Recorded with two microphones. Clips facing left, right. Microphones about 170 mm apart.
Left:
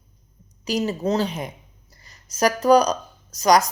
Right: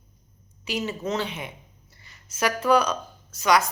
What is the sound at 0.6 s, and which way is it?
A woman's voice, 40° left (ahead or behind).